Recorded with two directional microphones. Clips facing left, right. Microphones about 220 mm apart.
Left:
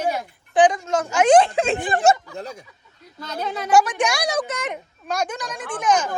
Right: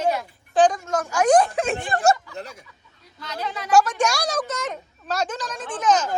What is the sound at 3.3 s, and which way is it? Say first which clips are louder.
Speech: left 3 dB; 45° left (ahead or behind).